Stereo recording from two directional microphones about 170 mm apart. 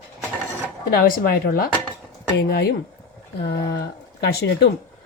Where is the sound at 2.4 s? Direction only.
70° left (ahead or behind).